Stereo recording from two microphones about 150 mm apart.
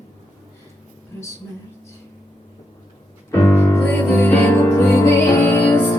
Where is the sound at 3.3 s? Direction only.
20° left (ahead or behind).